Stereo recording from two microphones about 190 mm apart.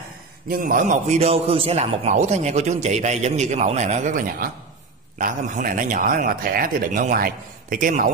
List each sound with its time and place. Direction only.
0.5 s a man's voice: 45° right (ahead or behind)